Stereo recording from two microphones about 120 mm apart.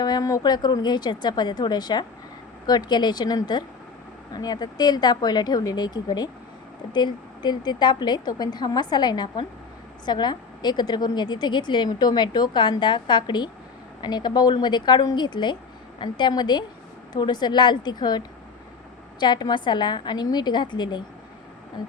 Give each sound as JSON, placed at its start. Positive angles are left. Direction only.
{"t": 0.0, "sound": "a woman's voice", "side_deg": 30}
{"t": 19.2, "sound": "a woman's voice", "side_deg": 35}